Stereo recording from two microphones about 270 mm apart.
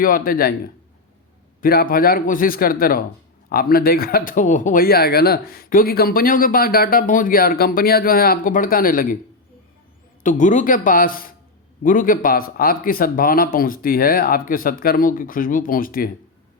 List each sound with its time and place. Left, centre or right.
0.0 s speech: left
10.2 s speech: left